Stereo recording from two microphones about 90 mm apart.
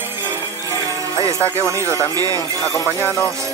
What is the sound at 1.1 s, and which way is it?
Speech, 35° right (ahead or behind).